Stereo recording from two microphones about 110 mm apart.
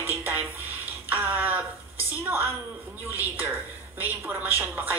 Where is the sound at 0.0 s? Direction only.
20° right (ahead or behind).